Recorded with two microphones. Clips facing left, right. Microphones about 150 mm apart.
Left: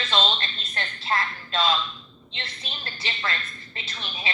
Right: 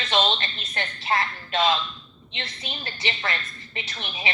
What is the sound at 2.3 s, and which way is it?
A woman's voice, 15° right (ahead or behind).